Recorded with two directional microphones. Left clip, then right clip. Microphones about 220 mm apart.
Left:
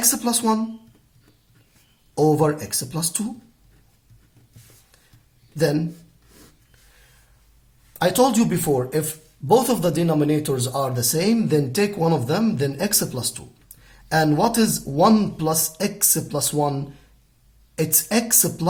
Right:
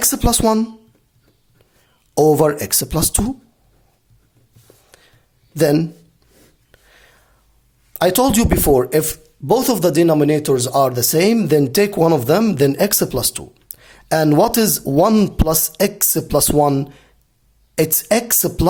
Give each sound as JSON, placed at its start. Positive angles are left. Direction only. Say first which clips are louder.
{"t": 0.0, "sound": "speech", "louder": "right 6 dB", "side_deg": -50}
{"t": 2.1, "sound": "speech", "louder": "right 6 dB", "side_deg": -50}
{"t": 5.5, "sound": "speech", "louder": "right 6 dB", "side_deg": -50}
{"t": 7.9, "sound": "speech", "louder": "right 3 dB", "side_deg": -45}